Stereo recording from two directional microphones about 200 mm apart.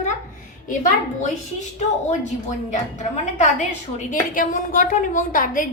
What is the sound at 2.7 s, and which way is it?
A woman's voice, 35° left (ahead or behind).